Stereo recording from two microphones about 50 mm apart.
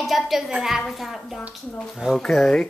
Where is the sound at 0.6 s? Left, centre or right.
Centre.